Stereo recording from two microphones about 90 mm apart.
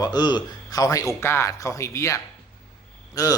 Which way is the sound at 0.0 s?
50° left (ahead or behind).